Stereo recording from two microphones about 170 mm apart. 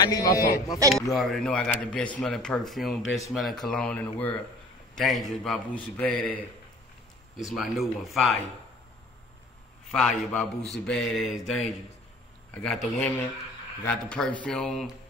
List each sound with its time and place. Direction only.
0.0 s speech: 20° left (ahead or behind)
0.8 s a man's voice: 20° right (ahead or behind)
1.1 s a man's voice: 5° left (ahead or behind)
7.3 s speech: centre (ahead or behind)
9.8 s speech: 5° left (ahead or behind)
12.6 s a man's voice: centre (ahead or behind)